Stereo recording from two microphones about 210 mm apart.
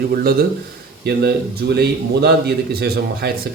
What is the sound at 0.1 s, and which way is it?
Speech, 45° right (ahead or behind).